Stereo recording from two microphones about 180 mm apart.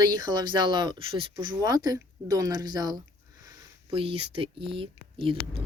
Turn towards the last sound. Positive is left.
turn(degrees=-30)  # may be behind; listen again after turning